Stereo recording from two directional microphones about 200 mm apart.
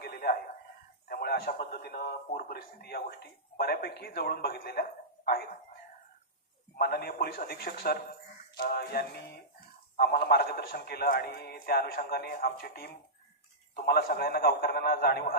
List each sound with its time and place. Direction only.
0.0 s a sound: 50° left (ahead or behind)
1.0 s a man's voice: 50° left (ahead or behind)
6.7 s a man's voice: 50° left (ahead or behind)